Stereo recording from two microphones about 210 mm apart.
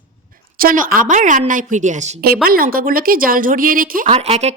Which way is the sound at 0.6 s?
40° right (ahead or behind).